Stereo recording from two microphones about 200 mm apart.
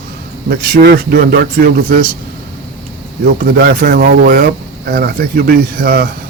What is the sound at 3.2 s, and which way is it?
Speech, 50° right (ahead or behind).